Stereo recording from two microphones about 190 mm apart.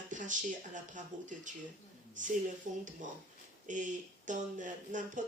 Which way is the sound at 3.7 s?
40° right (ahead or behind).